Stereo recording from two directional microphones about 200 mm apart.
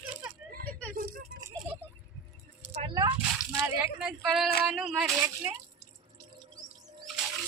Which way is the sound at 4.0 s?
Centre (ahead or behind).